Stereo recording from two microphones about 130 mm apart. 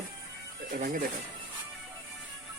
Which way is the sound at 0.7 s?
90° right.